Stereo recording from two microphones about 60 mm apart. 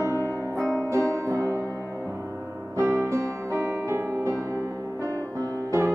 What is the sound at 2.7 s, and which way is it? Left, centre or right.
Music, right.